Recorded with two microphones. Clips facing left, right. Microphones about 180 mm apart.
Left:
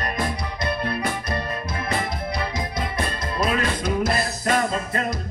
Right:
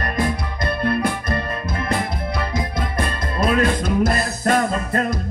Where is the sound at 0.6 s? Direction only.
55° right (ahead or behind).